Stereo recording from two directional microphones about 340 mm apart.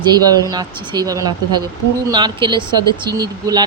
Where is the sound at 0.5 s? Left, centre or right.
Centre.